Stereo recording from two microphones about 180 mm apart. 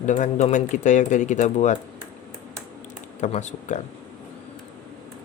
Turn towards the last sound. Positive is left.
turn(degrees=40)  # may be behind; listen again after turning